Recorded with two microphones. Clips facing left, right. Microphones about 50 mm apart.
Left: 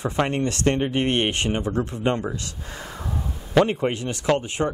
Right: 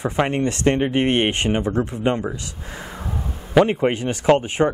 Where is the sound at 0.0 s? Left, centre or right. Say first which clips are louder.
Right 3 dB; right.